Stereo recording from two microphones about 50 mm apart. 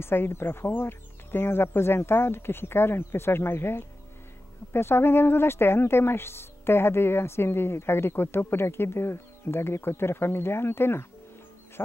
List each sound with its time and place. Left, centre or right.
0.0 s speech: left